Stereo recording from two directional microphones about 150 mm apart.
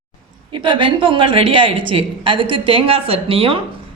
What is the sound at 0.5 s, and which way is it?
A woman's voice, 35° right (ahead or behind).